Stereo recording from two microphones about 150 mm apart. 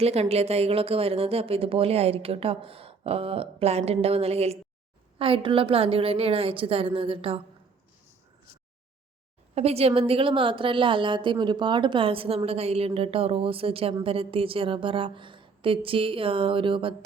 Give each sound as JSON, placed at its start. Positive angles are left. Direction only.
{"t": 0.0, "sound": "a woman's voice", "side_deg": -45}
{"t": 9.6, "sound": "a woman's voice", "side_deg": -45}